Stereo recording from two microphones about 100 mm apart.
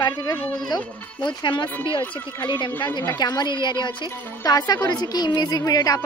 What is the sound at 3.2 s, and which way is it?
A woman's voice, 45° left (ahead or behind).